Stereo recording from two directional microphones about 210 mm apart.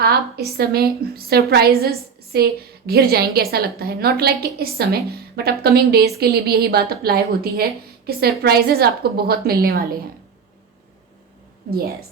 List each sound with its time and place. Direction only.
0.0 s a woman's voice: 50° right (ahead or behind)